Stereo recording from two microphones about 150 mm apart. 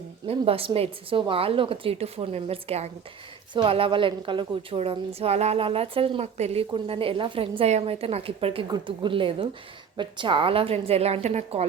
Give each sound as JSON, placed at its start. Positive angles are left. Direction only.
{"t": 0.3, "sound": "a woman's voice", "side_deg": -40}